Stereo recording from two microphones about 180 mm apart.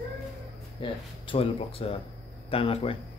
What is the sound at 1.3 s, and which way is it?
Speech, 30° left (ahead or behind).